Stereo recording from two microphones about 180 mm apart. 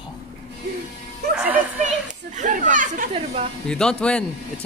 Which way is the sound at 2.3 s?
45° right (ahead or behind).